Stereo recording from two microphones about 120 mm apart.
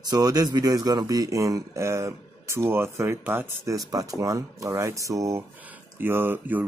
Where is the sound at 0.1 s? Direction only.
35° right (ahead or behind).